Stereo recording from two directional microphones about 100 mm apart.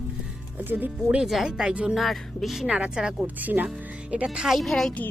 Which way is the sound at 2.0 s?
Centre (ahead or behind).